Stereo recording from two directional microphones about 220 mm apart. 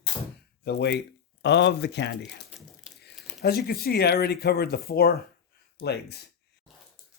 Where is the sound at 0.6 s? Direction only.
50° left (ahead or behind).